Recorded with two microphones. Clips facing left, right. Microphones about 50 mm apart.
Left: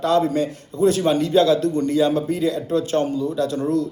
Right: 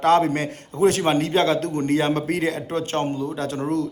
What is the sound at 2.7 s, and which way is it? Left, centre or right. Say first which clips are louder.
Speech: left 4 dB; right.